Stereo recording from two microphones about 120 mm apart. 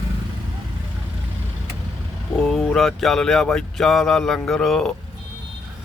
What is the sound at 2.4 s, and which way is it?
Speech, centre (ahead or behind).